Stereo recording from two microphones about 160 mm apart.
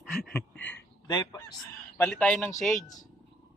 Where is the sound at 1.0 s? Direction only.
25° left (ahead or behind).